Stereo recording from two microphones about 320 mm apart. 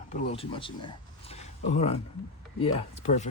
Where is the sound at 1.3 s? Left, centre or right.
Left.